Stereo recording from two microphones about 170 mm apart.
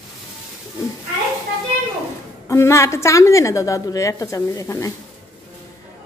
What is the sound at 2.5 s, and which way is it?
Speech, 15° left (ahead or behind).